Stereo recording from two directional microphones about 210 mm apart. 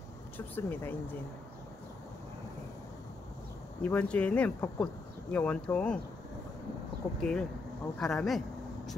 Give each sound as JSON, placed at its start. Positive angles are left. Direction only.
{"t": 0.6, "sound": "speech", "side_deg": 10}
{"t": 3.8, "sound": "speech", "side_deg": 5}
{"t": 7.2, "sound": "speech", "side_deg": 5}